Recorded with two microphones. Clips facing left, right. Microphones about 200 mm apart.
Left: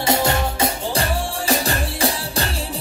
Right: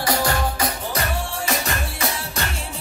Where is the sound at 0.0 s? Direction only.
25° left (ahead or behind).